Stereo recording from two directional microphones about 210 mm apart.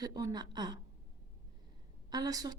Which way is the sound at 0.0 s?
15° right (ahead or behind).